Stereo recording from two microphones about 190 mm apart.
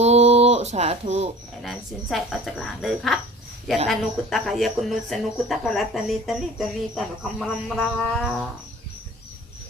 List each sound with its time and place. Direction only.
0.0 s music: 35° right (ahead or behind)
1.6 s speech: centre (ahead or behind)